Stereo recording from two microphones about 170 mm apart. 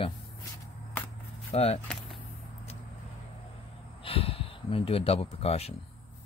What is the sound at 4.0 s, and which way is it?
Speech, 35° left (ahead or behind).